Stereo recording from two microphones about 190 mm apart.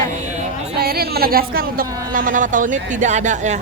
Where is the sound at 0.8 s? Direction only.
55° right (ahead or behind).